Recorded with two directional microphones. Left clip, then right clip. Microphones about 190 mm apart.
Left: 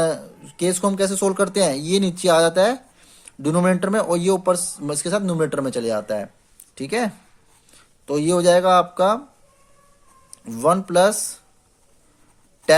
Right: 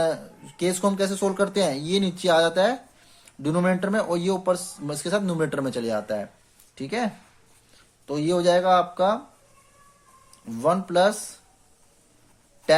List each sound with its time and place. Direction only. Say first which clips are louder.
0.0 s speech: left 3 dB; 30° left (ahead or behind)
10.3 s speech: left 4 dB; 35° left (ahead or behind)
12.7 s speech: left 4 dB; 35° left (ahead or behind)